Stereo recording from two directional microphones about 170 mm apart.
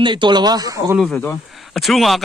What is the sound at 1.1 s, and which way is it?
Speech, 15° left (ahead or behind).